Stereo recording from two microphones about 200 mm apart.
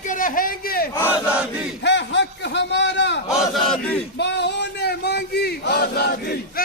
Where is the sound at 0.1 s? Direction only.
40° left (ahead or behind).